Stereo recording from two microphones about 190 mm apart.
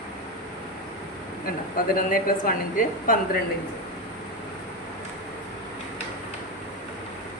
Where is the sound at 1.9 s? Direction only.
45° left (ahead or behind).